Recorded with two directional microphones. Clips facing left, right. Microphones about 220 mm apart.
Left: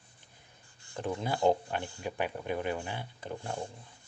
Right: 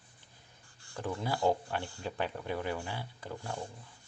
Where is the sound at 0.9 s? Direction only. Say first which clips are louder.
Left 2 dB; 20° left (ahead or behind).